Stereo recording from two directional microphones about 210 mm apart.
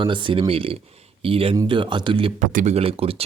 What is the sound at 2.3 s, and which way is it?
Speech, 35° right (ahead or behind).